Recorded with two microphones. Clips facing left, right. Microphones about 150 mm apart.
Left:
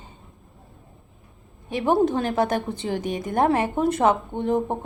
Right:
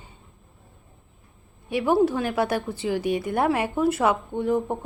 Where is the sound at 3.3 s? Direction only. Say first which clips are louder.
Left 6 dB; 35° left (ahead or behind).